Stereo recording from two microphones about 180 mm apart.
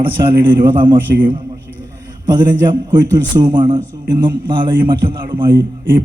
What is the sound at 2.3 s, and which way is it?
A man's voice, 25° right (ahead or behind).